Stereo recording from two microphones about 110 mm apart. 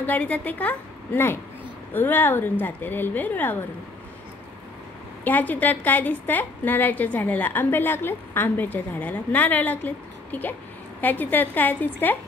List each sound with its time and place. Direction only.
0.0 s a woman's voice: 15° left (ahead or behind)
5.2 s a woman's voice: 15° left (ahead or behind)